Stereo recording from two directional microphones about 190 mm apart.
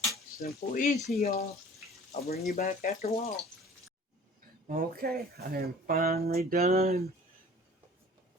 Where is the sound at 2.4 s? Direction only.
45° left (ahead or behind).